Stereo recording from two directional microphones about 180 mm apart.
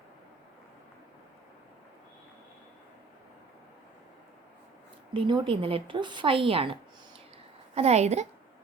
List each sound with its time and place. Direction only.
5.1 s a woman's voice: 30° right (ahead or behind)
7.8 s a woman's voice: 35° right (ahead or behind)